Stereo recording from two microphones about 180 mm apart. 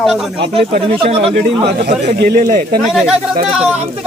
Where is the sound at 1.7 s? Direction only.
65° right (ahead or behind).